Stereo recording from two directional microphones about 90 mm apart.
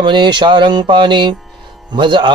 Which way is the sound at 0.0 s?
60° right (ahead or behind).